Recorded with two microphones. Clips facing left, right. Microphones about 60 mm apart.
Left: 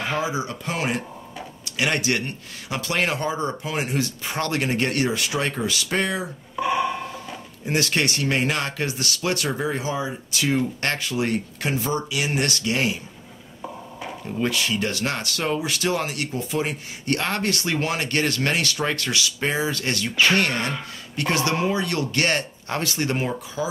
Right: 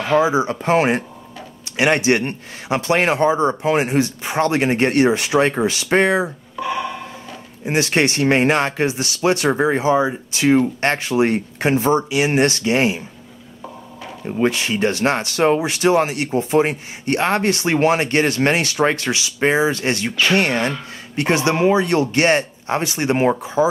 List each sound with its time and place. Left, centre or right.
0.2 s speech: right
6.5 s a sound: centre
7.6 s speech: right
10.3 s speech: right
14.2 s speech: right